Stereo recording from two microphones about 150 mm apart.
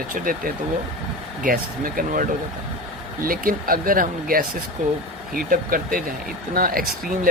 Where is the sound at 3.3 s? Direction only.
70° right (ahead or behind).